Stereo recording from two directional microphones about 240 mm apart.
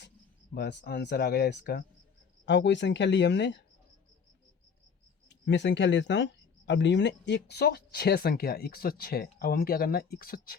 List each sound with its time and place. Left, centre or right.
0.5 s speech: left
5.5 s speech: left